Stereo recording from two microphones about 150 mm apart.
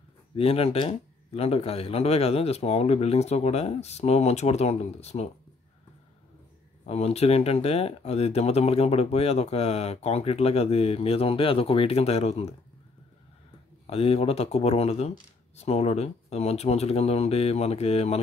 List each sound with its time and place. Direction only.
0.4 s speech: 40° left (ahead or behind)
6.9 s speech: 45° left (ahead or behind)
13.8 s speech: 40° left (ahead or behind)